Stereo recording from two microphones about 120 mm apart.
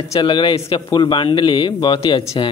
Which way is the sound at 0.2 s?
40° left (ahead or behind).